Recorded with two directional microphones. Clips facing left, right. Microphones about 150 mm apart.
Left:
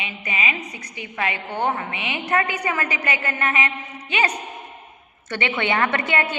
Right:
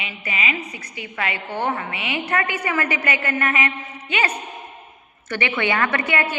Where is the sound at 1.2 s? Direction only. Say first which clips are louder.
Left 1 dB; 20° left (ahead or behind).